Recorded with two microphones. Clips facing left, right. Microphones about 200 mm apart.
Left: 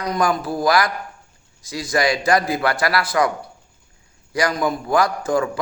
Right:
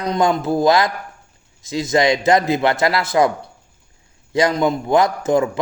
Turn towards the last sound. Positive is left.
turn(degrees=-20)  # may be behind; listen again after turning